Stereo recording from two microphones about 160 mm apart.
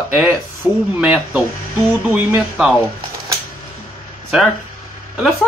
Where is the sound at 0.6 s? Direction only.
15° left (ahead or behind).